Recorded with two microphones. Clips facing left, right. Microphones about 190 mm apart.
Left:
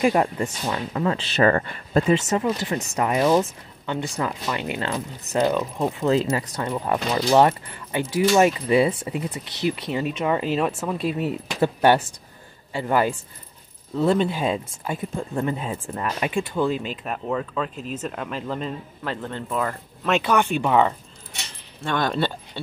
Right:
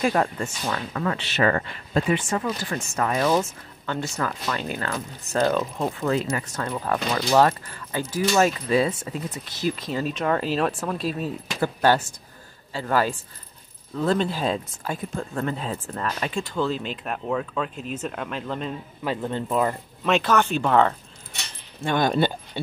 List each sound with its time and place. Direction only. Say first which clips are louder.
0.0 s speech: left 3 dB; 15° left (ahead or behind); by 1.6 s 35° left (ahead or behind)
2.0 s speech: left 5 dB; 25° left (ahead or behind)
6.1 s speech: left 4 dB; 30° left (ahead or behind)
6.8 s speech: left 2 dB; 15° left (ahead or behind)
9.4 s speech: left 2 dB; 65° left (ahead or behind)
10.1 s speech: left 1 dB; 10° left (ahead or behind)
11.0 s speech: left 3 dB; 65° left (ahead or behind)
11.3 s speech: left 4 dB; 20° left (ahead or behind); by 18.8 s centre (ahead or behind)
19.0 s speech: right 3 dB; 15° right (ahead or behind)
20.1 s speech: even; 10° left (ahead or behind)
21.8 s speech: right 2 dB; 10° right (ahead or behind)